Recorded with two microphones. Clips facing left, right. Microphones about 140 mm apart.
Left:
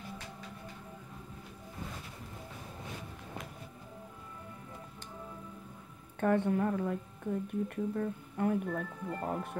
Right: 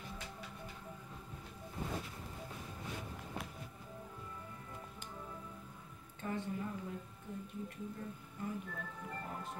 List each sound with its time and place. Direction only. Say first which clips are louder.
6.1 s speech: left 12 dB; 60° left (ahead or behind)